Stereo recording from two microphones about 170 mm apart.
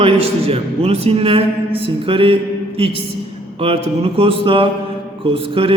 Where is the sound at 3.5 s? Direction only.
35° right (ahead or behind).